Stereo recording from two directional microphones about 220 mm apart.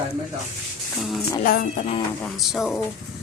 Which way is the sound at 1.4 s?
40° left (ahead or behind).